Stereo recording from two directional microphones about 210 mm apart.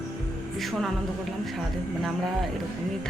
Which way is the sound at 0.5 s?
Centre (ahead or behind).